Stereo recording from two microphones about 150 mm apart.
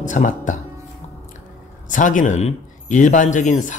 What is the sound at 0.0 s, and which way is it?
Speech, 55° left (ahead or behind).